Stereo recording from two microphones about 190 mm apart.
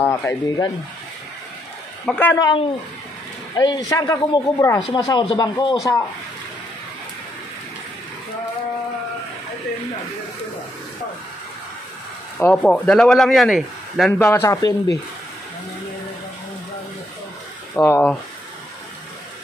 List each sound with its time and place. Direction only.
0.0 s speech: 10° left (ahead or behind)
2.0 s speech: 10° left (ahead or behind)
2.3 s speech: 20° left (ahead or behind)
12.4 s speech: 5° left (ahead or behind)
14.2 s speech: 15° left (ahead or behind)
17.7 s speech: 10° left (ahead or behind)